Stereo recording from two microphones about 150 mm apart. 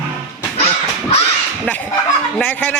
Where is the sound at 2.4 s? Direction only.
10° left (ahead or behind).